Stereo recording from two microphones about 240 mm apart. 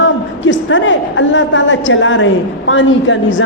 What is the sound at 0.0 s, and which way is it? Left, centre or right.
A woman's voice, left.